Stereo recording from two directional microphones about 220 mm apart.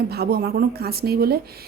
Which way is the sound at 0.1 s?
45° right (ahead or behind).